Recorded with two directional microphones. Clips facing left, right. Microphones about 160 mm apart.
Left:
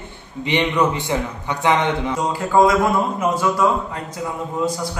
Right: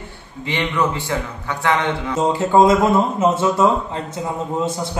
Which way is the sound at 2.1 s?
25° right (ahead or behind).